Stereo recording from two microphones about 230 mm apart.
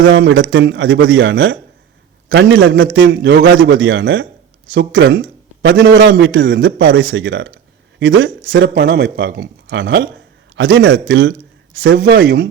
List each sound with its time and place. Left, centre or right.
0.0 s a man's voice: right
11.9 s speech: right